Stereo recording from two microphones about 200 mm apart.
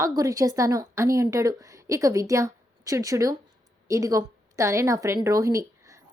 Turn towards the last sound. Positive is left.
turn(degrees=-15)  # may be behind; listen again after turning